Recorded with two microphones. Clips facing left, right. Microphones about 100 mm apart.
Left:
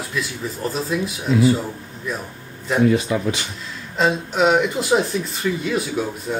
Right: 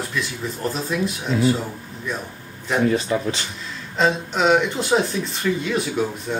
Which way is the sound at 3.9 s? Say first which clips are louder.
Left 1 dB; 5° left (ahead or behind).